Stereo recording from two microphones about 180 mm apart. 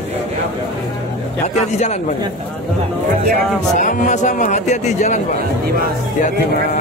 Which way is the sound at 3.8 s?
45° left (ahead or behind).